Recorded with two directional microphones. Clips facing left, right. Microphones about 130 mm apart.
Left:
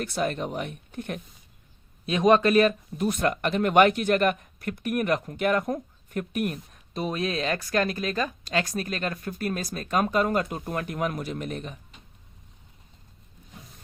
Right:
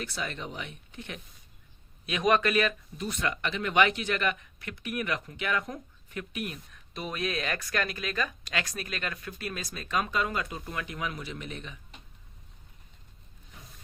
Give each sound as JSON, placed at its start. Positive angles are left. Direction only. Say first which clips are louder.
{"t": 0.0, "sound": "speech", "louder": "left 8 dB", "side_deg": 45}
{"t": 2.0, "sound": "speech", "louder": "left 6 dB", "side_deg": 30}
{"t": 3.0, "sound": "speech", "louder": "left 7 dB", "side_deg": 50}